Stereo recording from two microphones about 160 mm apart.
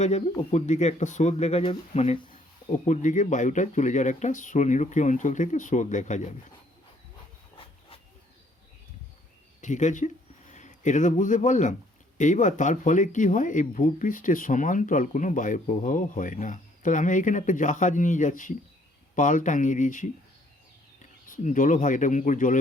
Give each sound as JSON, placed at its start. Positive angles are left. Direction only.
{"t": 0.0, "sound": "speech", "side_deg": 45}
{"t": 9.6, "sound": "speech", "side_deg": 50}
{"t": 21.2, "sound": "speech", "side_deg": 55}